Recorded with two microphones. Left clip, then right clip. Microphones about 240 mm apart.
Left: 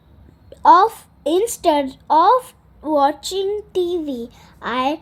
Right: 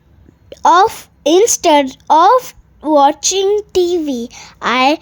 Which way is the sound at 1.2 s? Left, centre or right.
Right.